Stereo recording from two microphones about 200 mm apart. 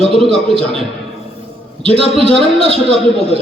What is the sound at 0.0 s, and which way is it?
A man's voice, 30° right (ahead or behind).